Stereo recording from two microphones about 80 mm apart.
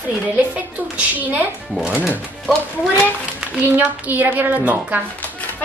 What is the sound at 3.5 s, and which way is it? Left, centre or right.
A woman's voice, right.